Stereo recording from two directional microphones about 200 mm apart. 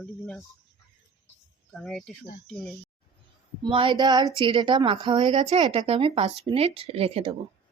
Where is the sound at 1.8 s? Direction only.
5° left (ahead or behind).